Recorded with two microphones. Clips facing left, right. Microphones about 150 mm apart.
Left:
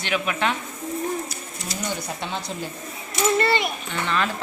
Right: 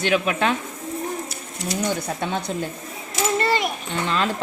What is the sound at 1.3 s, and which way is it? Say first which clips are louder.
Speech: right 5 dB; 55° right (ahead or behind).